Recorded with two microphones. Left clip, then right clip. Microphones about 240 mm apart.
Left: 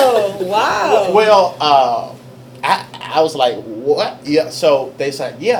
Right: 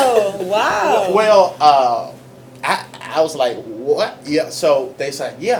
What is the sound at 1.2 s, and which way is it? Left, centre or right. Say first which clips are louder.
A man's voice: even; left.